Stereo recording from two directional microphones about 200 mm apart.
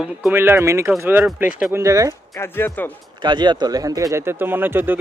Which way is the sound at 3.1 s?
20° right (ahead or behind).